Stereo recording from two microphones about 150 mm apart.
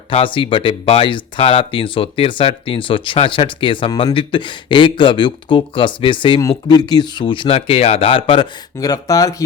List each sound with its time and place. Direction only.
0.1 s speech: 35° left (ahead or behind)
8.8 s speech: 25° left (ahead or behind)